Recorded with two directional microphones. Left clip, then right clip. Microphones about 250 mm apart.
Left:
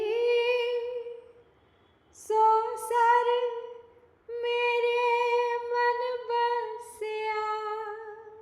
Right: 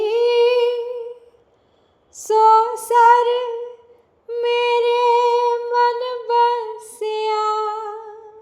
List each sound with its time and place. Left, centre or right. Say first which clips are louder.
0.0 s humming: right 10 dB; right
2.1 s female singing: right 10 dB; right